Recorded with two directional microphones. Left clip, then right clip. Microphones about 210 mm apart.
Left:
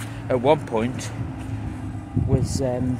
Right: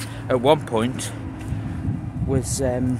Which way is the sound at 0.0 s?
10° right (ahead or behind).